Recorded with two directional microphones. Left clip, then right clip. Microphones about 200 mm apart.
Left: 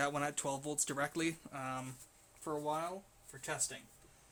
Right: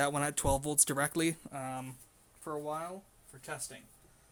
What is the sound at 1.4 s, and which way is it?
Speech, 25° right (ahead or behind).